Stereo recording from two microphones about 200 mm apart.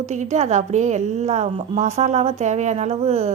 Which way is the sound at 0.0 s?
35° right (ahead or behind).